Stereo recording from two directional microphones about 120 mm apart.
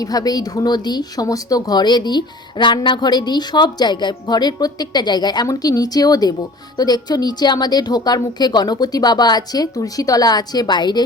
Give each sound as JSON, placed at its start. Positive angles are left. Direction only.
{"t": 0.0, "sound": "speech", "side_deg": 30}